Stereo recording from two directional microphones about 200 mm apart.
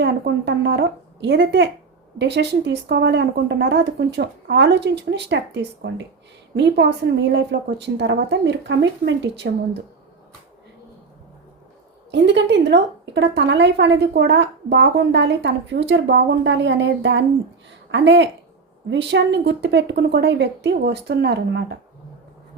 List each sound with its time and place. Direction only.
0.0 s a woman's voice: 60° right (ahead or behind)
12.1 s a woman's voice: 60° right (ahead or behind)